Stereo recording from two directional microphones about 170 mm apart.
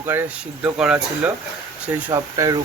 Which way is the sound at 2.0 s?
20° right (ahead or behind).